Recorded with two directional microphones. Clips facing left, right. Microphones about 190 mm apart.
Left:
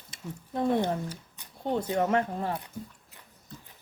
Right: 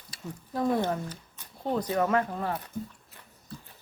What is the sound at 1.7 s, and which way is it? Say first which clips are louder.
Speech: even; 25° left (ahead or behind).